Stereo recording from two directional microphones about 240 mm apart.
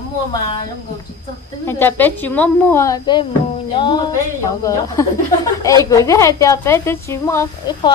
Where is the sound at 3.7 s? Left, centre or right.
Centre.